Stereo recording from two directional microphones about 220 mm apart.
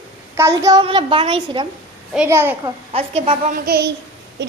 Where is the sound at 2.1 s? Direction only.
10° right (ahead or behind).